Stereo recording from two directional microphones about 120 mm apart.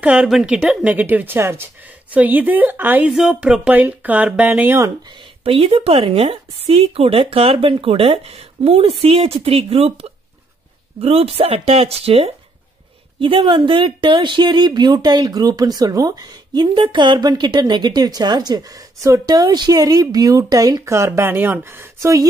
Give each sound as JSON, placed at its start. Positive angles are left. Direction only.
{"t": 0.0, "sound": "speech", "side_deg": -10}
{"t": 5.4, "sound": "speech", "side_deg": -55}
{"t": 13.2, "sound": "speech", "side_deg": -45}